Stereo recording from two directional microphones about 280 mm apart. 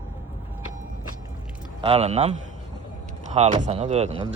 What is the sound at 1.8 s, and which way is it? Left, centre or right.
Speech, right.